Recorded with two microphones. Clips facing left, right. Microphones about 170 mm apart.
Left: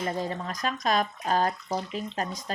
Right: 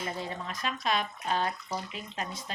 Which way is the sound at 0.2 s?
40° left (ahead or behind).